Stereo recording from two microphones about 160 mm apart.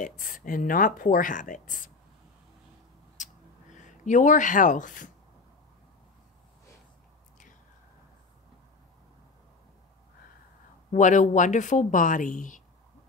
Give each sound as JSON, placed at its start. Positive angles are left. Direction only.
{"t": 0.2, "sound": "speech", "side_deg": 60}
{"t": 3.2, "sound": "gasp", "side_deg": 50}
{"t": 3.7, "sound": "speech", "side_deg": 50}
{"t": 10.9, "sound": "speech", "side_deg": 50}